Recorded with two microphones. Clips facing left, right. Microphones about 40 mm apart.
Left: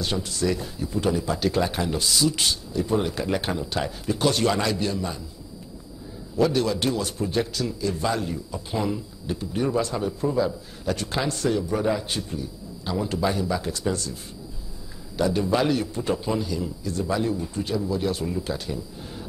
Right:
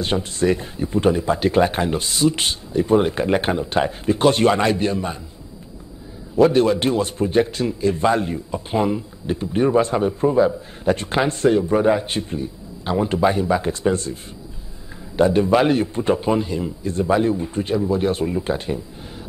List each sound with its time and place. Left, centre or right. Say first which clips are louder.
0.0 s a man's voice: right 6 dB; right
6.3 s a man's voice: right 7 dB; right